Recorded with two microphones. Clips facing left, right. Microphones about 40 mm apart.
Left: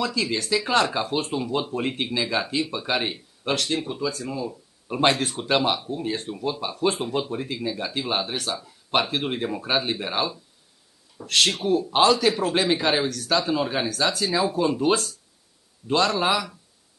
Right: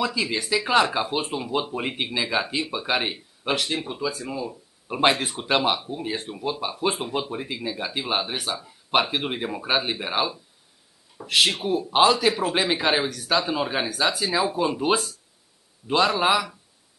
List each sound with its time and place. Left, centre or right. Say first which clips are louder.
0.0 s speech: even; centre